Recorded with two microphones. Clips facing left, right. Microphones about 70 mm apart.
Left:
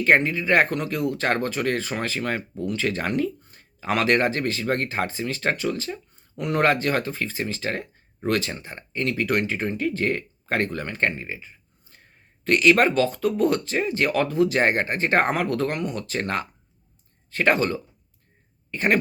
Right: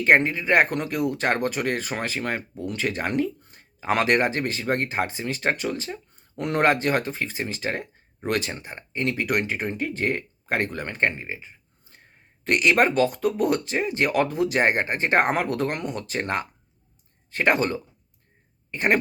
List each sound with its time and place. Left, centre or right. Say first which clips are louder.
0.0 s speech: even; right
6.3 s speech: even; right
6.7 s speech: right 2 dB; right